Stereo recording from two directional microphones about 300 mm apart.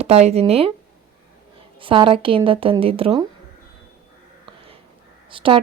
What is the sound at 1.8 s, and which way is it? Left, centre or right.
Speech, centre.